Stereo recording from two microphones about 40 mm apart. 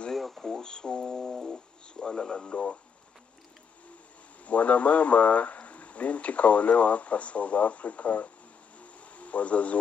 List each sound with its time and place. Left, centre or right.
0.1 s radio: centre
0.5 s music: centre
1.5 s radio: left
4.5 s speech: left